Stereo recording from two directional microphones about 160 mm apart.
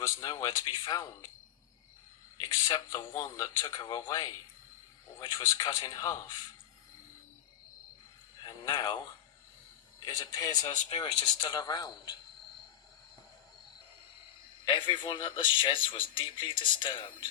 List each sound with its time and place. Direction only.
0.0 s speech: 20° left (ahead or behind)
2.4 s speech: 25° left (ahead or behind)
8.4 s speech: 25° left (ahead or behind)
14.7 s speech: 30° left (ahead or behind)